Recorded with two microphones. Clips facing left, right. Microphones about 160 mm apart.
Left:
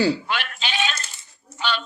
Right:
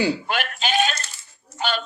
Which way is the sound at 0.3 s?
45° right (ahead or behind).